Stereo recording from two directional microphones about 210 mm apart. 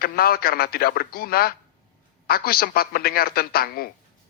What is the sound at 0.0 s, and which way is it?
Speech, 45° left (ahead or behind).